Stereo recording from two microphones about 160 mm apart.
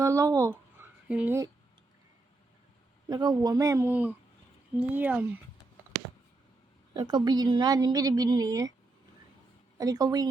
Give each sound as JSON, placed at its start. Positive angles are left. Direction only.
{"t": 0.0, "sound": "a sound", "side_deg": -20}
{"t": 1.0, "sound": "speech", "side_deg": -10}
{"t": 3.1, "sound": "a woman's voice", "side_deg": -25}
{"t": 6.9, "sound": "a woman's voice", "side_deg": -25}
{"t": 9.7, "sound": "a woman's voice", "side_deg": -25}